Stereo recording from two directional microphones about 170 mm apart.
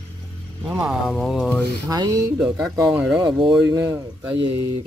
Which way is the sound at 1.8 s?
20° right (ahead or behind).